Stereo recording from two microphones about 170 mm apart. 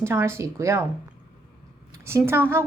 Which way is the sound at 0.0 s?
15° right (ahead or behind).